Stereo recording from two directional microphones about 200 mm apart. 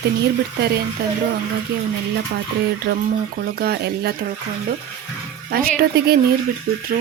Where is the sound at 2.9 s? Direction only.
50° right (ahead or behind).